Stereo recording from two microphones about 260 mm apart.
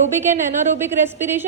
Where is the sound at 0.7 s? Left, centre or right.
Centre.